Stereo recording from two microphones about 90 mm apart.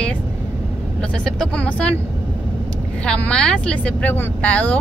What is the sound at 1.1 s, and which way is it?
Speech, 10° left (ahead or behind).